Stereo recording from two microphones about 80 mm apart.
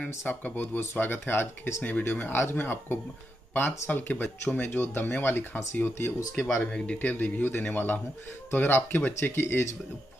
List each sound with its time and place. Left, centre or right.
0.3 s speech: left
6.3 s speech: centre; by 9.7 s left